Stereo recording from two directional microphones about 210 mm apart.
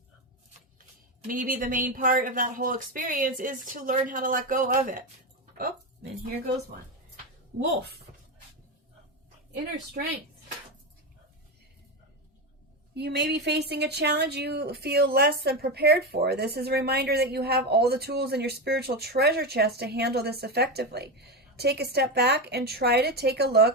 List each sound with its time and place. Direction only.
1.2 s speech: 40° right (ahead or behind)
7.6 s speech: 50° right (ahead or behind)
12.9 s speech: 55° right (ahead or behind)